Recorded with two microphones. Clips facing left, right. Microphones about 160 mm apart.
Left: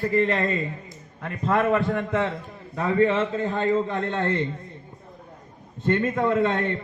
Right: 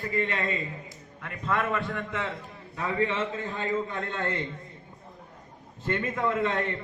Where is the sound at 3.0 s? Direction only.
45° left (ahead or behind).